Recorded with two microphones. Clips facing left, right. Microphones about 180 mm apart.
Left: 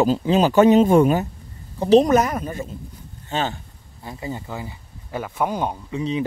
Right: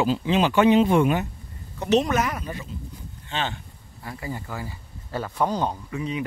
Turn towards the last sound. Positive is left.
turn(degrees=15)  # may be behind; listen again after turning